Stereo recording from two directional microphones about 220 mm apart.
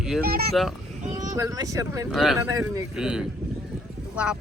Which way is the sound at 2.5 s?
15° right (ahead or behind).